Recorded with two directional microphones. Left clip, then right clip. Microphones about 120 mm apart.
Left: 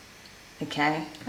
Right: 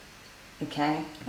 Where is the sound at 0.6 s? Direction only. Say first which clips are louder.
Left 3 dB; 40° left (ahead or behind).